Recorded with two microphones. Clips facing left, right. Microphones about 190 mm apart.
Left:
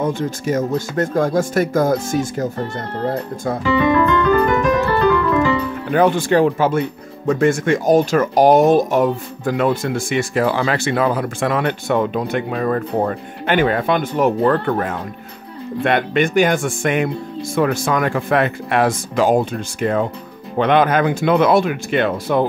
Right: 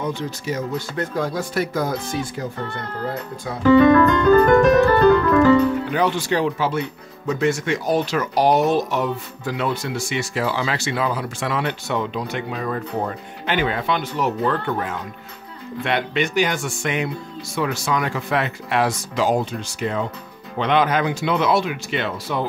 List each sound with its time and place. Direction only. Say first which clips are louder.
0.0 s speech: left 6 dB; 50° left (ahead or behind)
3.6 s music: right 4 dB; 45° right (ahead or behind)
5.9 s speech: left 6 dB; 50° left (ahead or behind)